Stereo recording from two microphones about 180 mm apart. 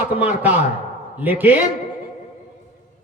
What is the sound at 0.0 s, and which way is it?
A man's voice, 10° right (ahead or behind).